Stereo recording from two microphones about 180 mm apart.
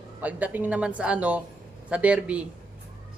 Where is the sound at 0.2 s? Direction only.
10° right (ahead or behind).